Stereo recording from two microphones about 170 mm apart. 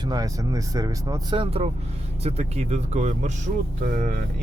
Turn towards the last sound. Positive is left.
turn(degrees=-60)  # may be behind; listen again after turning